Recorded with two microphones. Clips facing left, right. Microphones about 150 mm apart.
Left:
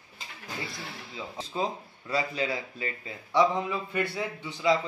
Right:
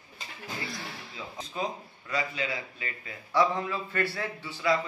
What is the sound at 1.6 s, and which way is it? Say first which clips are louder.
Speech: left 3 dB; 30° left (ahead or behind).